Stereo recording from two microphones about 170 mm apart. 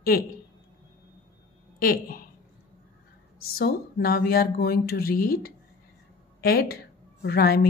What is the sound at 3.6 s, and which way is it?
Speech, 65° left (ahead or behind).